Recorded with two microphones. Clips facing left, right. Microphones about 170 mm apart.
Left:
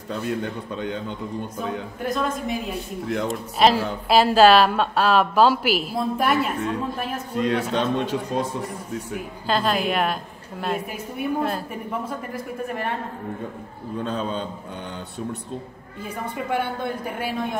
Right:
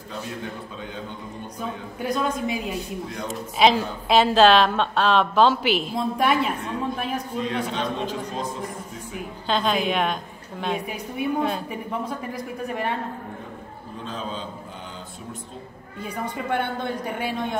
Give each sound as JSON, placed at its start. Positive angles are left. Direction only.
{"t": 0.2, "sound": "a man's voice", "side_deg": 65}
{"t": 1.6, "sound": "a woman's voice", "side_deg": 0}
{"t": 7.3, "sound": "a man's voice", "side_deg": 70}
{"t": 9.5, "sound": "a woman's voice", "side_deg": 5}
{"t": 14.0, "sound": "a man's voice", "side_deg": 60}
{"t": 16.0, "sound": "a woman's voice", "side_deg": 5}